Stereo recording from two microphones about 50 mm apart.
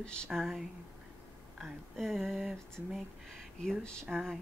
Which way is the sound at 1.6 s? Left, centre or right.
Centre.